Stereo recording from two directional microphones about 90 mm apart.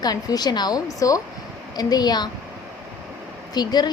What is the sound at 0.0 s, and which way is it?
Speech, 45° left (ahead or behind).